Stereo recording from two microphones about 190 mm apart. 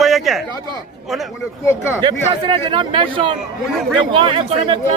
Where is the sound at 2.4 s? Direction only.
25° right (ahead or behind).